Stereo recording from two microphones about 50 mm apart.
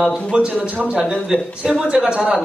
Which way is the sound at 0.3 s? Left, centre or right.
Right.